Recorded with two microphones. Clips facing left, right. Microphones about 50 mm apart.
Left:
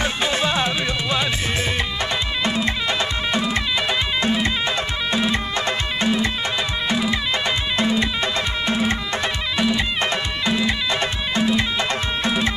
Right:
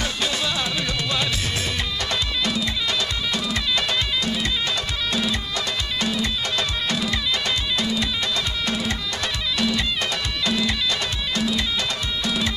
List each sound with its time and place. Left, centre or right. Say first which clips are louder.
0.0 s music: left 4 dB; left
2.4 s music: left 6 dB; left
4.2 s music: left 4 dB; left